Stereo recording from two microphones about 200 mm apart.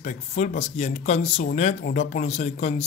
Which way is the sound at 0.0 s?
35° left (ahead or behind).